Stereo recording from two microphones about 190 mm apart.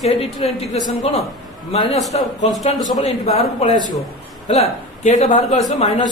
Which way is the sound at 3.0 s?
35° left (ahead or behind).